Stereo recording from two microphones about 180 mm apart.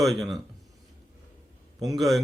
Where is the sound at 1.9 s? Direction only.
Centre (ahead or behind).